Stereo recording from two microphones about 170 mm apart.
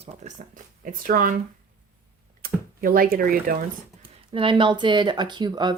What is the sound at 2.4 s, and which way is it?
Speech, 60° right (ahead or behind).